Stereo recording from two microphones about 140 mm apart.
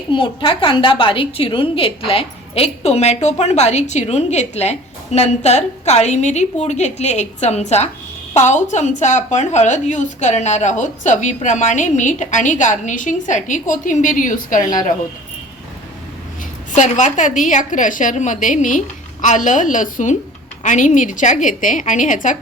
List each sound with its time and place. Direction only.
0.1 s a woman's voice: 35° left (ahead or behind); by 14.8 s 70° left (ahead or behind)
16.7 s a woman's voice: 60° left (ahead or behind)